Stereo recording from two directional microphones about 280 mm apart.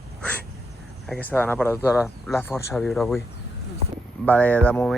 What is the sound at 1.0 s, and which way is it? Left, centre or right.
Speech, centre.